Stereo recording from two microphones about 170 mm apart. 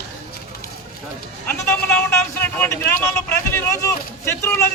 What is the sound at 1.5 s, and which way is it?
Speech, 10° left (ahead or behind).